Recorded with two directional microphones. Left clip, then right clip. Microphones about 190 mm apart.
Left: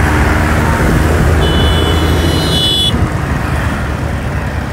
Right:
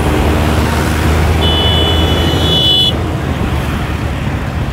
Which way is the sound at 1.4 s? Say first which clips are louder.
Right 1 dB; 50° left (ahead or behind).